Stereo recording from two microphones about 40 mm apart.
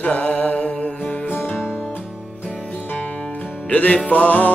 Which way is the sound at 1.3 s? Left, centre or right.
Left.